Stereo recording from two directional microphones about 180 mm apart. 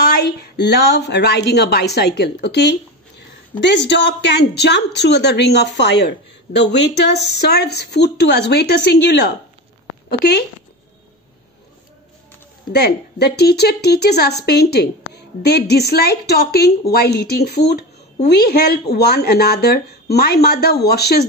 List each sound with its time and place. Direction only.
0.2 s a woman's voice: 70° left (ahead or behind)
12.7 s a woman's voice: 65° left (ahead or behind)